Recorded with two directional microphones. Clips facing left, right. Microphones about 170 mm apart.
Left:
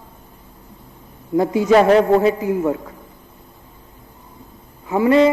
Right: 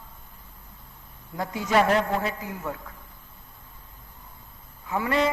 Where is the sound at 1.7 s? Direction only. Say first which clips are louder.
Left 9 dB; 30° left (ahead or behind).